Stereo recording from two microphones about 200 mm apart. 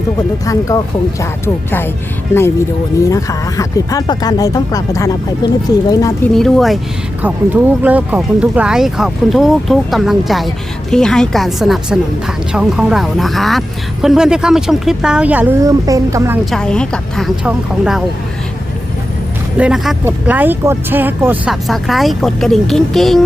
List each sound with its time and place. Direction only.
0.4 s speech: 15° left (ahead or behind)
2.3 s speech: 10° left (ahead or behind)
6.3 s speech: centre (ahead or behind); by 16.4 s 15° right (ahead or behind)
16.5 s speech: 5° left (ahead or behind)
19.5 s speech: 5° right (ahead or behind)